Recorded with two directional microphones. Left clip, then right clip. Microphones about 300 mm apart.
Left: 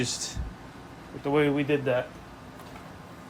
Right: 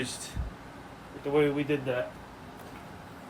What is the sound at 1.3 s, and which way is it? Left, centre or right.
Speech, left.